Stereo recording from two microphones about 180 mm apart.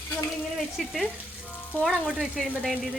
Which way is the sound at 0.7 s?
Centre (ahead or behind).